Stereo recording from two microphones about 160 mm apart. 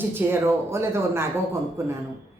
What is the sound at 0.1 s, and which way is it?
A woman's voice, 15° right (ahead or behind).